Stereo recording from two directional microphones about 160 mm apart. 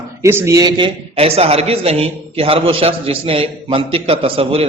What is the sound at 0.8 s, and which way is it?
A man's voice, 35° right (ahead or behind).